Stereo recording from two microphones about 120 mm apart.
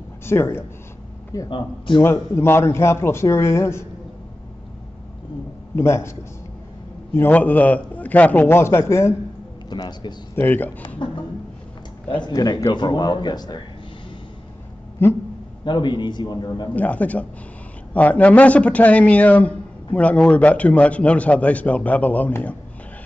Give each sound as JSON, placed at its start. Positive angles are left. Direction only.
{"t": 0.2, "sound": "a man's voice", "side_deg": 20}
{"t": 5.8, "sound": "a man's voice", "side_deg": 20}
{"t": 7.2, "sound": "a man's voice", "side_deg": 15}
{"t": 9.7, "sound": "a man's voice", "side_deg": 35}
{"t": 10.3, "sound": "a man's voice", "side_deg": 15}
{"t": 11.0, "sound": "a sound", "side_deg": 40}
{"t": 12.3, "sound": "a man's voice", "side_deg": 30}
{"t": 15.0, "sound": "a man's voice", "side_deg": 20}
{"t": 15.6, "sound": "a man's voice", "side_deg": 40}
{"t": 16.7, "sound": "a man's voice", "side_deg": 15}